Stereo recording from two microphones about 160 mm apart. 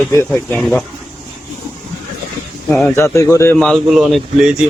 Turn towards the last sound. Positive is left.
turn(degrees=0)  # may be behind; listen again after turning